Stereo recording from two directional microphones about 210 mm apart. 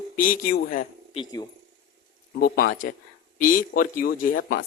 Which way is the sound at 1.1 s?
20° left (ahead or behind).